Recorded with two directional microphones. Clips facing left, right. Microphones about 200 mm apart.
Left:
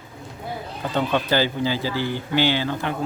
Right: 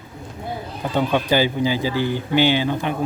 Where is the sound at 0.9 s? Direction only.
15° right (ahead or behind).